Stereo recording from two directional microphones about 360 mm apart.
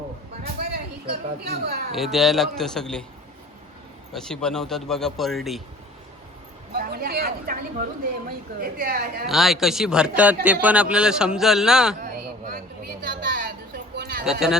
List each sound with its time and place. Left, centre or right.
0.4 s music: right
1.9 s speech: centre
4.1 s speech: centre
6.7 s speech: right
9.2 s speech: centre
11.9 s a sound: right
14.3 s speech: centre